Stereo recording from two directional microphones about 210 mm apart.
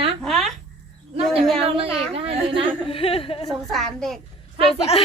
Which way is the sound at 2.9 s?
25° left (ahead or behind).